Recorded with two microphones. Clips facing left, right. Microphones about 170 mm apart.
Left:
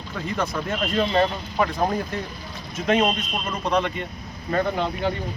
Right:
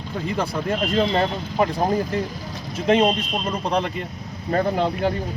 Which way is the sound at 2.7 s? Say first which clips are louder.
Right 3 dB; 30° right (ahead or behind).